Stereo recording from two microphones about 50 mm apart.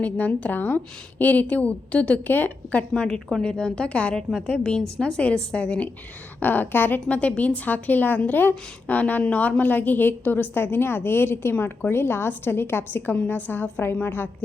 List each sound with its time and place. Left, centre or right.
0.0 s a woman's voice: left
2.2 s a woman's voice: left
2.9 s a woman's voice: centre
6.4 s a woman's voice: left
7.1 s a woman's voice: left